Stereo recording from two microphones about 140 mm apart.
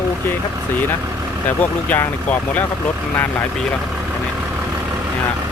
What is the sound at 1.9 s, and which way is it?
Speech, 10° left (ahead or behind).